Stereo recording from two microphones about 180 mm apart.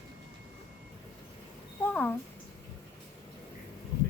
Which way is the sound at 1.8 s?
10° left (ahead or behind).